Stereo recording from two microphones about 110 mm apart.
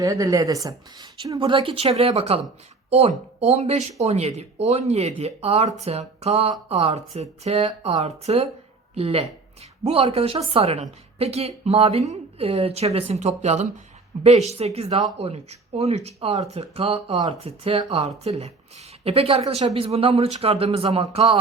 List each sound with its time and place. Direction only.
0.0 s speech: 30° right (ahead or behind)
1.4 s speech: 55° right (ahead or behind)
2.9 s a woman's voice: 75° right (ahead or behind); by 13.7 s 90° right
14.3 s a woman's voice: 75° right (ahead or behind)
18.2 s speech: 75° right (ahead or behind); by 21.3 s 55° right (ahead or behind)